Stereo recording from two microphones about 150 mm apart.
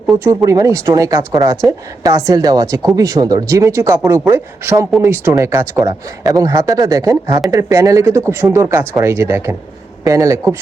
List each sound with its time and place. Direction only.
0.3 s a woman's voice: 20° right (ahead or behind)